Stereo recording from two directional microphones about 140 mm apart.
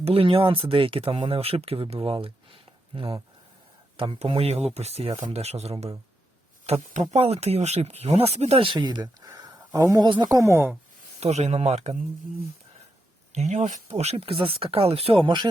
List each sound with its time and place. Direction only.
0.0 s speech: 40° right (ahead or behind)
6.9 s speech: 50° right (ahead or behind); by 9.0 s 35° right (ahead or behind)
9.2 s a sound: 25° right (ahead or behind)
10.2 s speech: 20° right (ahead or behind)
11.2 s speech: 50° right (ahead or behind)
13.3 s speech: 55° right (ahead or behind); by 15.4 s 35° right (ahead or behind)